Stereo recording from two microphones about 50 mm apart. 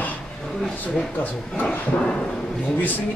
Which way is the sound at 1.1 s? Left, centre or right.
Left.